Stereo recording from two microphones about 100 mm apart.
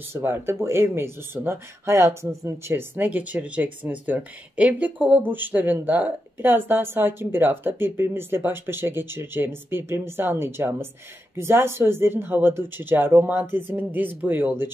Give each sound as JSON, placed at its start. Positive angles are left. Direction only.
{"t": 0.1, "sound": "speech", "side_deg": -25}